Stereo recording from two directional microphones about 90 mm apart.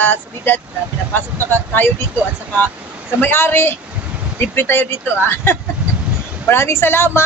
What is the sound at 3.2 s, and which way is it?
Speech, 25° left (ahead or behind).